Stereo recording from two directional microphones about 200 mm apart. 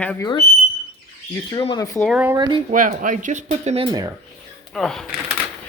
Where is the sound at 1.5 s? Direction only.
20° left (ahead or behind).